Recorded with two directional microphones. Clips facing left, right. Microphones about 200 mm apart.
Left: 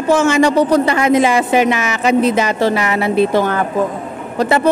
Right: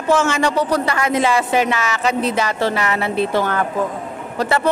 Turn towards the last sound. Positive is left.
turn(degrees=20)  # may be behind; listen again after turning